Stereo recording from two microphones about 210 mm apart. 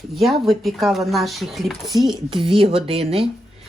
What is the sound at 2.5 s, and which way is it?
Speech, 25° right (ahead or behind).